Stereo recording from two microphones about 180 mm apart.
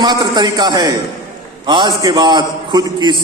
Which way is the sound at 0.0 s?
25° right (ahead or behind).